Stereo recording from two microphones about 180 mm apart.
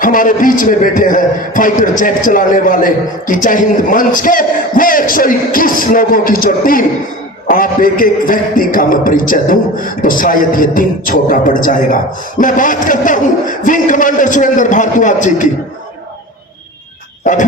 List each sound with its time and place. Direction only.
0.0 s a man's voice: 50° left (ahead or behind)